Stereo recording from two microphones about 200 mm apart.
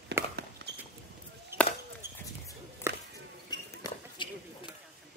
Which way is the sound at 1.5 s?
10° right (ahead or behind).